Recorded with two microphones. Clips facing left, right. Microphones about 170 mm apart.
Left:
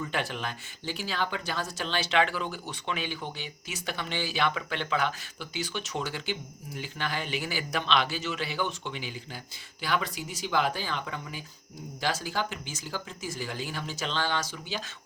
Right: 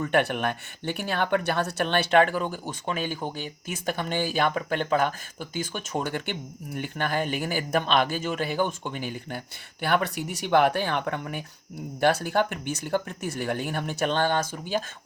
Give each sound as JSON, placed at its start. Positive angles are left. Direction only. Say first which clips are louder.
{"t": 0.0, "sound": "speech", "louder": "right 8 dB", "side_deg": -65}